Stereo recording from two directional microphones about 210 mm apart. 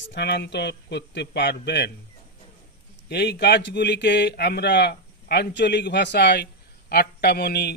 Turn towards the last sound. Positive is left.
turn(degrees=50)  # may be behind; listen again after turning